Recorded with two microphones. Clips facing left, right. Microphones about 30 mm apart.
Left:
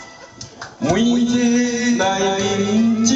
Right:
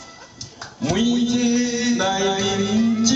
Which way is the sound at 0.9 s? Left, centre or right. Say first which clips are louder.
Left 3 dB; centre.